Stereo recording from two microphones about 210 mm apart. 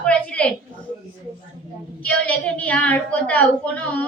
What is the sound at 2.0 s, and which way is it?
A woman's voice, 5° left (ahead or behind).